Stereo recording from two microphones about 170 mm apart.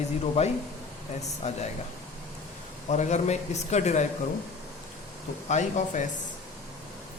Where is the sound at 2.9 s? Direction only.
45° left (ahead or behind).